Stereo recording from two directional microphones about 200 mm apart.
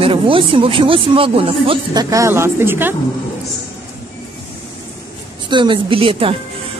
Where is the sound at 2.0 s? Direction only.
15° right (ahead or behind).